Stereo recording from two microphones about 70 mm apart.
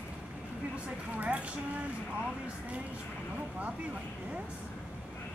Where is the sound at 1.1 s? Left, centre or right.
Right.